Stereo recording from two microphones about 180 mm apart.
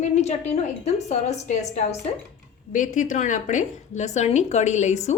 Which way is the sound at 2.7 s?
45° left (ahead or behind).